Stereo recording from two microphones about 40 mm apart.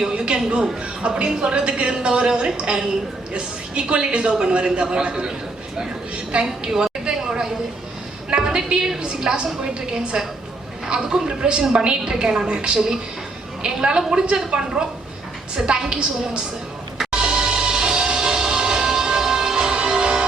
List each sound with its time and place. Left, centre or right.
0.0 s a sound: centre
1.4 s a woman's voice: right
6.3 s a sound: centre
9.0 s a woman's voice: centre
10.8 s a woman's voice: right
17.0 s music: centre